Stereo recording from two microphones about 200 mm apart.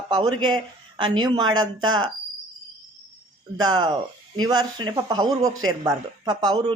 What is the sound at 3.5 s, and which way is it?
Speech, 20° right (ahead or behind).